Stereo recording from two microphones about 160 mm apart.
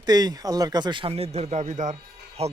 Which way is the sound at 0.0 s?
25° right (ahead or behind).